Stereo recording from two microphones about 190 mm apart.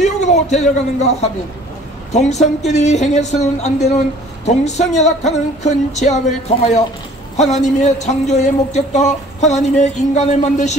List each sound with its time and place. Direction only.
0.2 s speech: 35° left (ahead or behind)
7.3 s speech: 35° left (ahead or behind)